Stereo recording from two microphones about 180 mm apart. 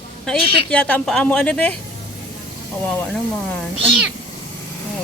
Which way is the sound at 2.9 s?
10° left (ahead or behind).